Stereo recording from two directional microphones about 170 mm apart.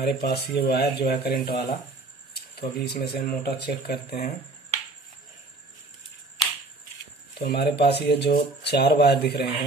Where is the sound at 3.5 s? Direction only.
70° left (ahead or behind).